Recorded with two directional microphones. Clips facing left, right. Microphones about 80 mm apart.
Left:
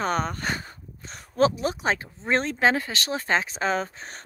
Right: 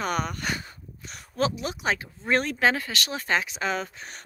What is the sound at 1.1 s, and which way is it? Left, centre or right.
Speech, left.